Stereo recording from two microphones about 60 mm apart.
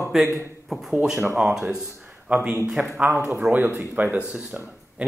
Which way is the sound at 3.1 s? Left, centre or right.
Right.